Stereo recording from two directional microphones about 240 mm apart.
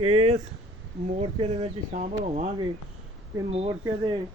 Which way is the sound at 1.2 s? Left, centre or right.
Right.